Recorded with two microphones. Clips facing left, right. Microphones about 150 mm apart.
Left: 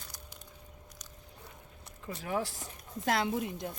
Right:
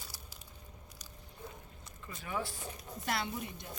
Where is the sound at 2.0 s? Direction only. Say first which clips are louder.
Left 5 dB; 85° left.